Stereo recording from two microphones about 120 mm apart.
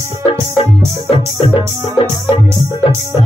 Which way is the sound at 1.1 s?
55° left (ahead or behind).